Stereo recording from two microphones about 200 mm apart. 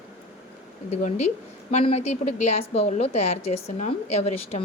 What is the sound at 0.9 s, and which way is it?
A woman's voice, 35° left (ahead or behind).